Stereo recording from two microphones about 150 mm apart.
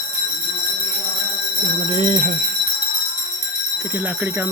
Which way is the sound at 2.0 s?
55° right (ahead or behind).